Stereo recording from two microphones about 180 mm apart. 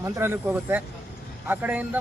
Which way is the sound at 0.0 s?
15° right (ahead or behind).